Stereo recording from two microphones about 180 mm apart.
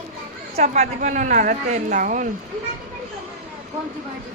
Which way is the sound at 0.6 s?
40° right (ahead or behind).